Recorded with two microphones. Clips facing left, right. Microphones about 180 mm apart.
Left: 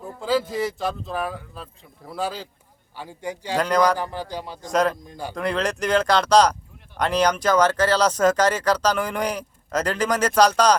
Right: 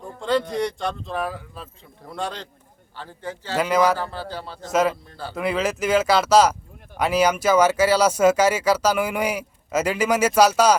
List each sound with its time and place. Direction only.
0.0 s a man's voice: 5° left (ahead or behind)
3.6 s speech: 5° right (ahead or behind)
3.9 s a man's voice: 15° left (ahead or behind)
4.7 s speech: 5° right (ahead or behind)
4.9 s a man's voice: 15° left (ahead or behind)
5.3 s speech: 5° right (ahead or behind)